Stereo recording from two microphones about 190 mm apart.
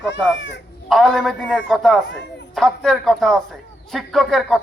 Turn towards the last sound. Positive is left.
turn(degrees=0)  # may be behind; listen again after turning